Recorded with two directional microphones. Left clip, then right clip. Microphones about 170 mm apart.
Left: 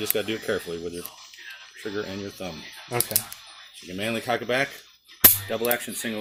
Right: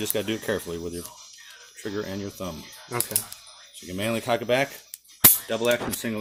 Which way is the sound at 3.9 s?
45° right (ahead or behind).